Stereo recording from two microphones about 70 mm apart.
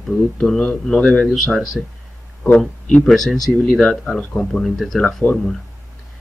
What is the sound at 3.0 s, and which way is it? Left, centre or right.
Speech, centre.